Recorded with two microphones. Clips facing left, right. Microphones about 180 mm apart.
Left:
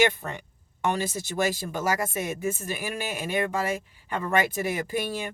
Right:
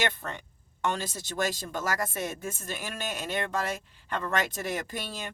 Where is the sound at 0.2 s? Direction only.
15° left (ahead or behind).